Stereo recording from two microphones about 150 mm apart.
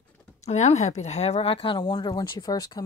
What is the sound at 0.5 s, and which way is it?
Speech, 50° left (ahead or behind).